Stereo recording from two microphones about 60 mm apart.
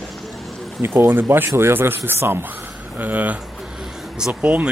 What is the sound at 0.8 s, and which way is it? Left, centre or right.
Speech, right.